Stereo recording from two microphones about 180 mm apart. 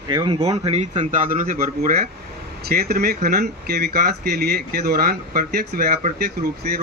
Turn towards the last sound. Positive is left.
turn(degrees=-60)  # may be behind; listen again after turning